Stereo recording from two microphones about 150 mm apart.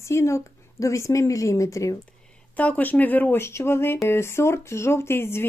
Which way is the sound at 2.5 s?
10° left (ahead or behind).